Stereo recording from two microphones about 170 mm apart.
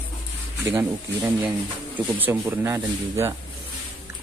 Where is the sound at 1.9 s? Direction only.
10° right (ahead or behind).